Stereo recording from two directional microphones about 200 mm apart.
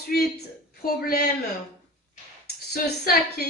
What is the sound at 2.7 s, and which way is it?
Speech, 55° left (ahead or behind).